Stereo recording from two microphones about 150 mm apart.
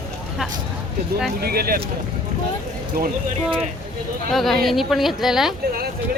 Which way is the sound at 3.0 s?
75° right (ahead or behind).